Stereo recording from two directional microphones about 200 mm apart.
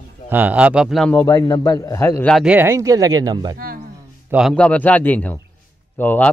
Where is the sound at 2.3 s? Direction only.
5° right (ahead or behind).